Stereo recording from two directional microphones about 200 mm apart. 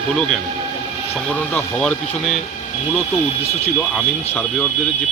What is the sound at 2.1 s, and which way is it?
Speech, 35° left (ahead or behind).